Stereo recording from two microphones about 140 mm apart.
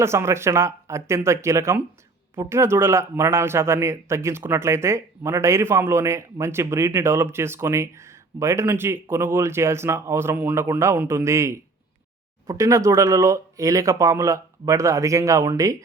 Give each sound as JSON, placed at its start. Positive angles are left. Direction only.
{"t": 0.0, "sound": "a man's voice", "side_deg": -20}